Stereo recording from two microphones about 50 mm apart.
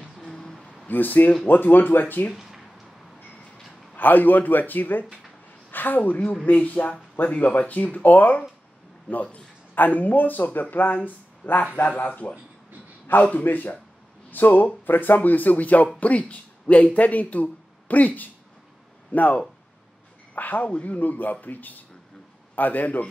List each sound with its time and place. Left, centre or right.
0.2 s a sound: centre
0.8 s speech: left
3.9 s speech: left
11.4 s a man's voice: left